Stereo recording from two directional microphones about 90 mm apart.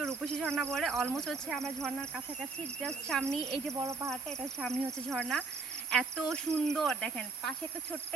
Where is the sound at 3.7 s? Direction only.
35° right (ahead or behind).